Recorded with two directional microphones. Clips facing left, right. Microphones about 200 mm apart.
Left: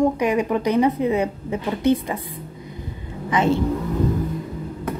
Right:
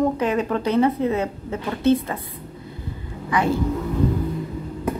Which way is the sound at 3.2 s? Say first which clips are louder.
Left 2 dB; 25° left (ahead or behind).